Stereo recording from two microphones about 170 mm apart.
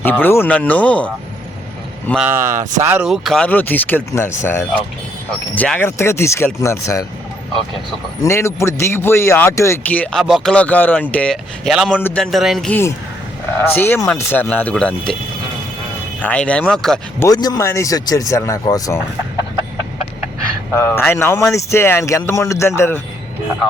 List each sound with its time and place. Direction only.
0.0 s a man's voice: 10° left (ahead or behind)
2.1 s a man's voice: 10° right (ahead or behind); by 7.0 s 15° left (ahead or behind)
8.2 s a man's voice: 15° left (ahead or behind); by 12.7 s centre (ahead or behind)
13.6 s a man's voice: 10° left (ahead or behind)
16.2 s speech: 5° left (ahead or behind)
17.2 s speech: 20° left (ahead or behind)
20.7 s a man's voice: 15° left (ahead or behind)